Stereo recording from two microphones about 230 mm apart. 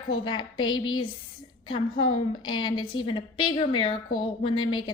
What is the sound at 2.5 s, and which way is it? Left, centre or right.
A woman's voice, centre.